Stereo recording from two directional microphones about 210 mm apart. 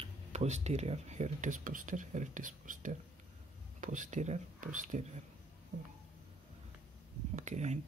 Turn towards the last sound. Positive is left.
turn(degrees=-35)  # may be behind; listen again after turning